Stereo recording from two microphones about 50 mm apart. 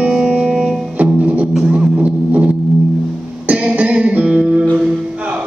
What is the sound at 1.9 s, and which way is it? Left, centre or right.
Music, right.